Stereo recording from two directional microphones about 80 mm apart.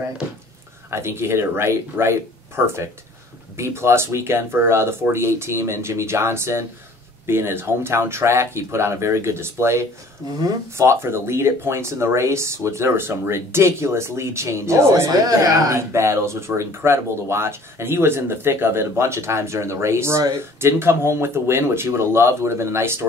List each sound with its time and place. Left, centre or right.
0.8 s speech: right
10.2 s speech: right
10.8 s speech: right
15.0 s speech: right